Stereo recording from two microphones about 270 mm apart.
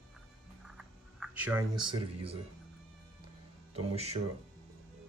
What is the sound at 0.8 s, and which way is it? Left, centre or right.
Speech, centre.